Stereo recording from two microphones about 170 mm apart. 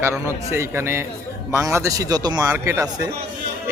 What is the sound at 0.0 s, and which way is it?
Speech, 15° right (ahead or behind).